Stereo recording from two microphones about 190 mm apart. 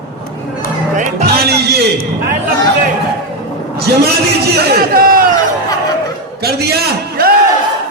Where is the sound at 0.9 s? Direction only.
55° right (ahead or behind).